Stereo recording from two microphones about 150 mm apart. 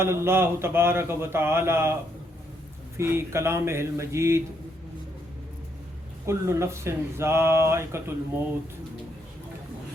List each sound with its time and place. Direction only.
0.0 s speech: 15° right (ahead or behind)
3.0 s speech: 15° right (ahead or behind)
6.2 s speech: 20° right (ahead or behind)